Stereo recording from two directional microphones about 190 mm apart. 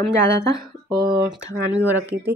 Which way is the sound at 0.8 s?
25° right (ahead or behind).